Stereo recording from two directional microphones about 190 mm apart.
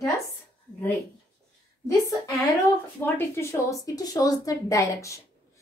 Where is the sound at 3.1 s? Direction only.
15° left (ahead or behind).